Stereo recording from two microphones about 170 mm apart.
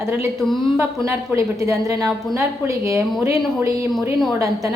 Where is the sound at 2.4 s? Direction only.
15° right (ahead or behind).